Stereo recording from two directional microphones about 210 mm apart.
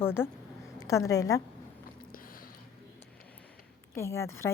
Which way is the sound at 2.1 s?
40° left (ahead or behind).